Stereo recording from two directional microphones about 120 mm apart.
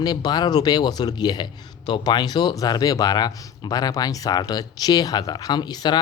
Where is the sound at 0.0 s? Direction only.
35° left (ahead or behind).